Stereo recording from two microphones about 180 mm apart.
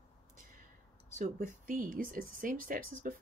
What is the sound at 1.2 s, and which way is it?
Speech, 45° right (ahead or behind).